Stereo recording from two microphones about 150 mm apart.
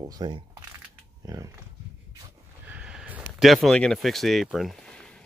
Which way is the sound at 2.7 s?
5° right (ahead or behind).